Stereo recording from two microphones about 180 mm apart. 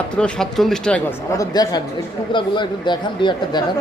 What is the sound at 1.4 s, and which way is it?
Speech, 20° left (ahead or behind).